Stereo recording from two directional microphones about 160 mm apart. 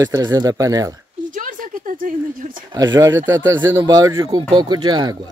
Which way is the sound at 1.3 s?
60° right (ahead or behind).